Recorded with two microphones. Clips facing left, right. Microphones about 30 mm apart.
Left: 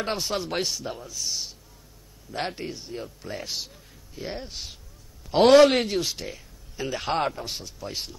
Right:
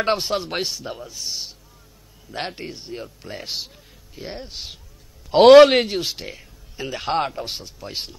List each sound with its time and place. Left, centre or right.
0.0 s speech: right
0.3 s speech: right
1.0 s a man's voice: right; by 4.5 s centre
5.4 s speech: right
5.7 s speech: right
6.9 s speech: centre
7.3 s a man's voice: right